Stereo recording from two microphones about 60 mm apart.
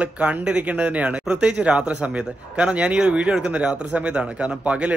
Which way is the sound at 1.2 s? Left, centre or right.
Centre.